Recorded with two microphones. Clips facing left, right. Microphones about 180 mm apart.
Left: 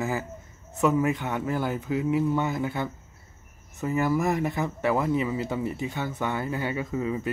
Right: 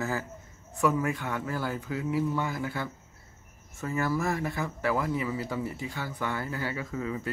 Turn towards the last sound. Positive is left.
turn(degrees=20)  # may be behind; listen again after turning